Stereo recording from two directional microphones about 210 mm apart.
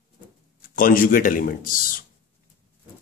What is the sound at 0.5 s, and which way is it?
Speech, 40° left (ahead or behind).